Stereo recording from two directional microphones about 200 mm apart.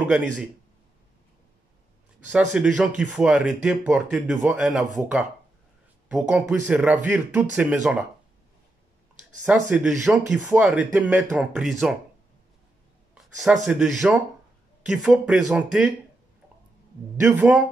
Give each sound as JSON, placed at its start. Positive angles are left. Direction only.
{"t": 2.3, "sound": "speech", "side_deg": -5}
{"t": 9.4, "sound": "speech", "side_deg": -5}
{"t": 13.1, "sound": "a sound", "side_deg": -5}
{"t": 13.7, "sound": "speech", "side_deg": 0}
{"t": 17.2, "sound": "speech", "side_deg": -10}